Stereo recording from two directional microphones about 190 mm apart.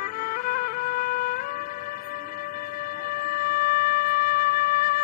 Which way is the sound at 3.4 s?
50° left (ahead or behind).